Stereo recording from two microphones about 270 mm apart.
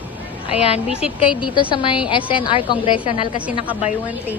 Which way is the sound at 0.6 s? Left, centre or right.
Left.